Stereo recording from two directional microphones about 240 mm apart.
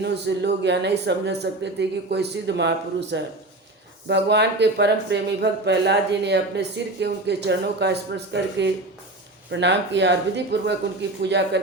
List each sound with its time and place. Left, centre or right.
0.0 s speech: right